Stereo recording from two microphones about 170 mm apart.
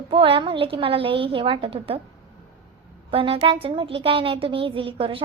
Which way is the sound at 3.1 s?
35° right (ahead or behind).